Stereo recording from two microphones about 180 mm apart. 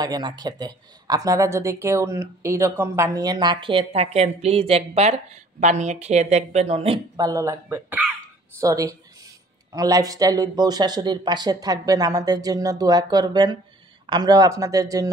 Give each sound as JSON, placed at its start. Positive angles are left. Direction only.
{"t": 0.0, "sound": "speech", "side_deg": -20}
{"t": 7.2, "sound": "speech", "side_deg": -20}